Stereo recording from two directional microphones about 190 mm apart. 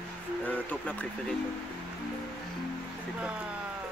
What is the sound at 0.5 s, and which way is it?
Speech, 10° left (ahead or behind).